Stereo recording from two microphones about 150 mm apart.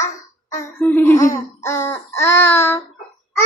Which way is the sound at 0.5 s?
15° left (ahead or behind).